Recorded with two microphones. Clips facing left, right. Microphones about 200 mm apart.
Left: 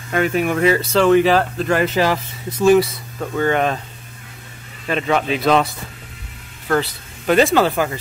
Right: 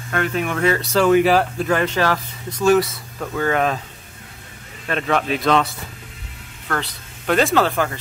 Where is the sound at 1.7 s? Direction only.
5° left (ahead or behind).